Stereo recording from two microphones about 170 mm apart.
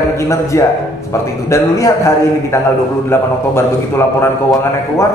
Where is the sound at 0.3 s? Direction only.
20° left (ahead or behind).